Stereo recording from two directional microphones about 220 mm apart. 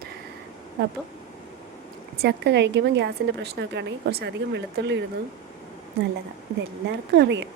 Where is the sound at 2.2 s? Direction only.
50° right (ahead or behind).